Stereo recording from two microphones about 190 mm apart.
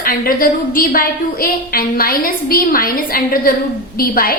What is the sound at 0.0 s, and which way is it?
A woman's voice, 50° left (ahead or behind).